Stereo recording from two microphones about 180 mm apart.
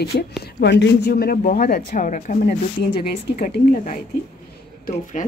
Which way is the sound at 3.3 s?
50° left (ahead or behind).